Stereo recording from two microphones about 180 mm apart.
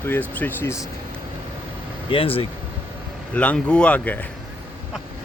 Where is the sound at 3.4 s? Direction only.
5° left (ahead or behind).